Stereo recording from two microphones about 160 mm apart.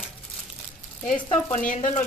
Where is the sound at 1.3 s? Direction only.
50° left (ahead or behind).